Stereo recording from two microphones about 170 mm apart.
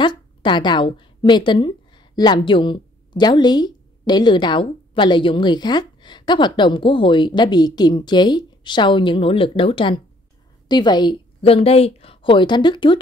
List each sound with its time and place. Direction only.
0.0 s a woman's voice: 25° left (ahead or behind)